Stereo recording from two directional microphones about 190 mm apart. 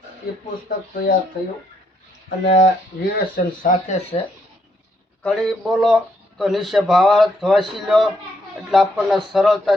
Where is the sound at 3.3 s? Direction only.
45° left (ahead or behind).